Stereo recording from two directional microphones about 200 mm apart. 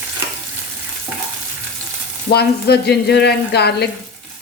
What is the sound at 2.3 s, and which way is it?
Speech, 55° left (ahead or behind).